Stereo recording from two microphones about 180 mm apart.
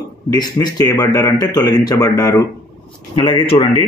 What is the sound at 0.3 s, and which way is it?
Speech, 20° left (ahead or behind).